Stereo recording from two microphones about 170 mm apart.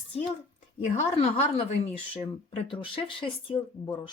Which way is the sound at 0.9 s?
35° left (ahead or behind).